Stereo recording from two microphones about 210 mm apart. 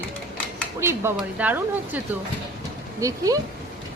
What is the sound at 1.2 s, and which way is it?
Speech, 5° right (ahead or behind).